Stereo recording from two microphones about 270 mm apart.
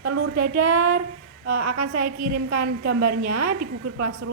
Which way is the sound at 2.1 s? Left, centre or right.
Right.